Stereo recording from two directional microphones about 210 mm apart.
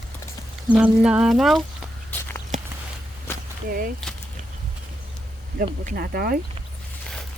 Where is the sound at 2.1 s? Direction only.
10° left (ahead or behind).